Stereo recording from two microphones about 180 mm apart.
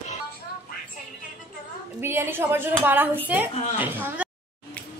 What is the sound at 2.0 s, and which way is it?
A woman's voice, 15° right (ahead or behind).